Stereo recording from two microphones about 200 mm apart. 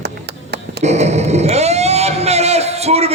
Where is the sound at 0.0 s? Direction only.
55° right (ahead or behind).